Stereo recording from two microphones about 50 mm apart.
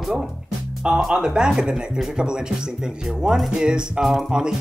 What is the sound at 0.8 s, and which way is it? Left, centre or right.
Speech, centre.